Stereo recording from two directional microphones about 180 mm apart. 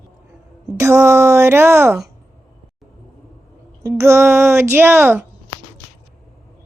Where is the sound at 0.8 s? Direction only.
15° right (ahead or behind).